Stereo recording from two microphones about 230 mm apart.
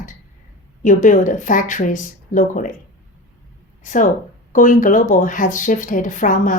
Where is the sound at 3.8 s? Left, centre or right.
Left.